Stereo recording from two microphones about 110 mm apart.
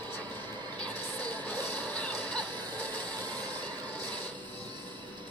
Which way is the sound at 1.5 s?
15° left (ahead or behind).